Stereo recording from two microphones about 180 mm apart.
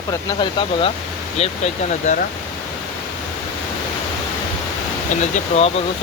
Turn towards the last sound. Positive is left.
turn(degrees=40)  # may be behind; listen again after turning